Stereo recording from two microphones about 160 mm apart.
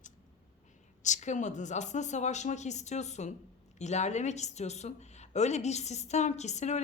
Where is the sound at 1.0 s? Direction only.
50° left (ahead or behind).